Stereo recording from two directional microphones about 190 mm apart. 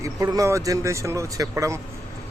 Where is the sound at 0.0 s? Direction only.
20° right (ahead or behind).